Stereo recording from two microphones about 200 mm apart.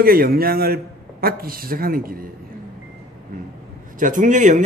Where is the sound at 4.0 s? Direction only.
40° right (ahead or behind).